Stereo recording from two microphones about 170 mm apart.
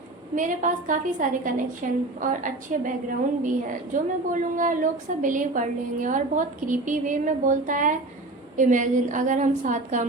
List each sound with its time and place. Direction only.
0.3 s a woman's voice: 50° right (ahead or behind)